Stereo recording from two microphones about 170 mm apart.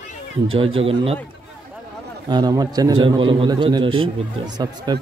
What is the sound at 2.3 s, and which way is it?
A man's voice, 25° right (ahead or behind).